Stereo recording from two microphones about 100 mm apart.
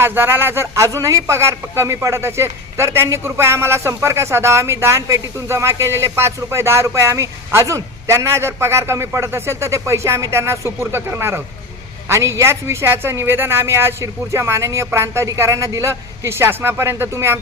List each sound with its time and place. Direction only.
0.0 s speech: 20° right (ahead or behind)